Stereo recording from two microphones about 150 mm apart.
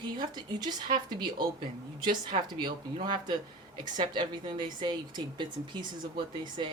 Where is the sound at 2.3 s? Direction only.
30° right (ahead or behind).